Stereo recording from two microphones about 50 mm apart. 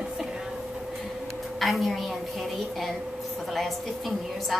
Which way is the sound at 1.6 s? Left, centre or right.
Centre.